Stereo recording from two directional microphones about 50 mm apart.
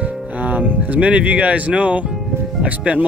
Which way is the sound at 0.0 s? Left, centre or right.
Right.